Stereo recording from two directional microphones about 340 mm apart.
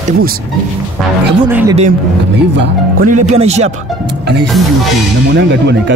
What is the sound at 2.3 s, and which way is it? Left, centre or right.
Speech, right.